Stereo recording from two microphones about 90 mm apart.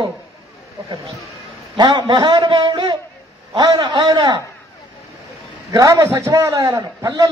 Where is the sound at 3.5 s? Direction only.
50° right (ahead or behind).